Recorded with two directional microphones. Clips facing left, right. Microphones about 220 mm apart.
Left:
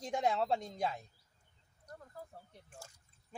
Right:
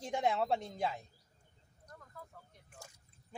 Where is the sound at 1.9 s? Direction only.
30° left (ahead or behind).